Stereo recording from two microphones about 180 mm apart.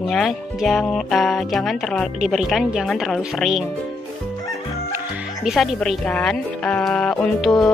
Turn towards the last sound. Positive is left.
turn(degrees=0)  # may be behind; listen again after turning